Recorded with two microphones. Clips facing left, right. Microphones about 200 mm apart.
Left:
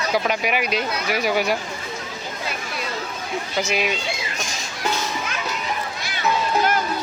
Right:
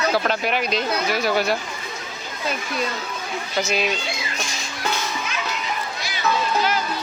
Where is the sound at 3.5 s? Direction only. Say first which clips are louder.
Right 1 dB; 10° left (ahead or behind).